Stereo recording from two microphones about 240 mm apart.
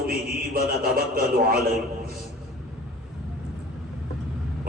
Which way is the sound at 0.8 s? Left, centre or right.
Right.